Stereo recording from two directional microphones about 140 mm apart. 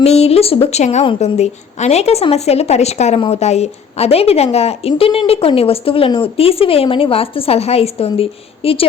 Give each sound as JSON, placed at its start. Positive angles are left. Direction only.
{"t": 0.0, "sound": "speech", "side_deg": 50}